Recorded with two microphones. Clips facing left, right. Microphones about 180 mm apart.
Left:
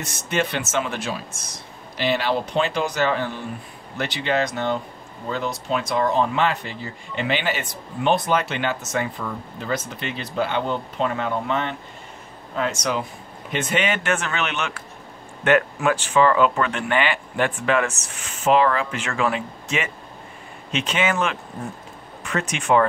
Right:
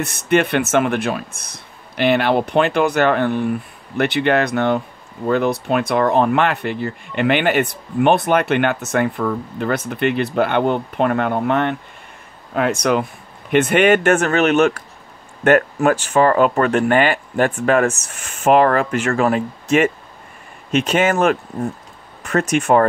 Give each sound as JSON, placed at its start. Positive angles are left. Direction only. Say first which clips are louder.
{"t": 0.0, "sound": "speech", "louder": "right 8 dB", "side_deg": -60}